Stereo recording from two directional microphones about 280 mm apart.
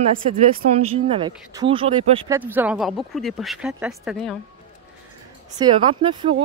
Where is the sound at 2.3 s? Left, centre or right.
Centre.